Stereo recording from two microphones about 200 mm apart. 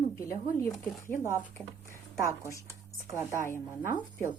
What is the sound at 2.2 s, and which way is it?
A woman's voice, 15° right (ahead or behind).